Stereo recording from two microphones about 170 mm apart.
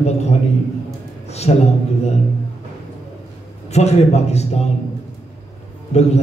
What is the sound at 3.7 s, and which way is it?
Speech, 40° left (ahead or behind).